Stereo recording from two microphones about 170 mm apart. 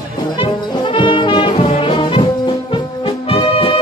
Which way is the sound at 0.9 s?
30° left (ahead or behind).